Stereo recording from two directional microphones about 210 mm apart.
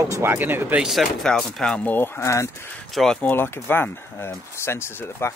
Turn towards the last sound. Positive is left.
turn(degrees=10)  # may be behind; listen again after turning